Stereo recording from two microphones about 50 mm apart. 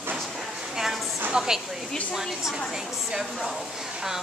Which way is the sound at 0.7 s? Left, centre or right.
Centre.